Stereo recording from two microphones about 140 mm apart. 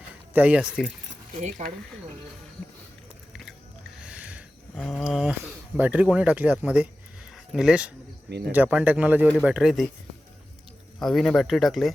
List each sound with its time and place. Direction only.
0.3 s speech: 10° right (ahead or behind)
1.4 s speech: 55° right (ahead or behind)
3.9 s a sound: 5° right (ahead or behind)
4.7 s speech: 5° left (ahead or behind)
5.4 s speech: 10° right (ahead or behind)
11.0 s speech: centre (ahead or behind)